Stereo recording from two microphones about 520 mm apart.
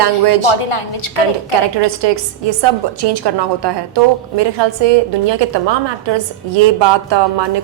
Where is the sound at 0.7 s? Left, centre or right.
Left.